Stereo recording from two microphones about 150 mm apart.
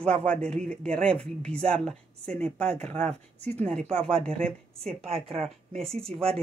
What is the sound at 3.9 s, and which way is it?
Speech, 5° left (ahead or behind).